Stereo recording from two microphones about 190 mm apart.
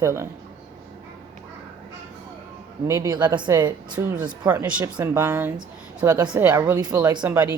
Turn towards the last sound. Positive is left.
turn(degrees=-15)  # may be behind; listen again after turning